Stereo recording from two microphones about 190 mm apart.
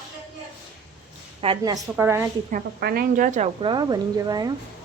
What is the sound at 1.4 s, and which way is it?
Speech, 30° right (ahead or behind).